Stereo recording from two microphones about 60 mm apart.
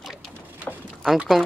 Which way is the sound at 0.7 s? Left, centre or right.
Centre.